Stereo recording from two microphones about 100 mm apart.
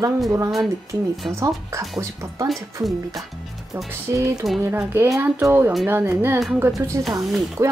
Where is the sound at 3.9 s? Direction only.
30° right (ahead or behind).